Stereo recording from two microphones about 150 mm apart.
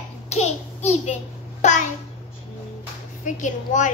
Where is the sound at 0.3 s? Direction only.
45° left (ahead or behind).